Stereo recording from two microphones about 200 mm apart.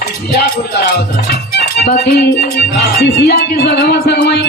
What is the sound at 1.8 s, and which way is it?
A woman's voice, 55° left (ahead or behind).